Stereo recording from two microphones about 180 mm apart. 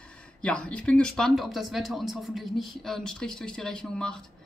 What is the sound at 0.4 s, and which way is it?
Speech, 5° left (ahead or behind).